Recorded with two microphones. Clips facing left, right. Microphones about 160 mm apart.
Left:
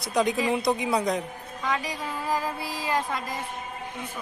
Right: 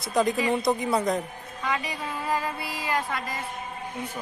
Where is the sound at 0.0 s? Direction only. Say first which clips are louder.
Even; centre (ahead or behind).